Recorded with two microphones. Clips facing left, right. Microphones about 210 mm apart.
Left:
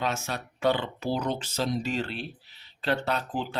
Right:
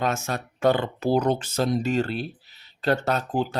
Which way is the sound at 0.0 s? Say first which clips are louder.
Right 4 dB; 50° right (ahead or behind).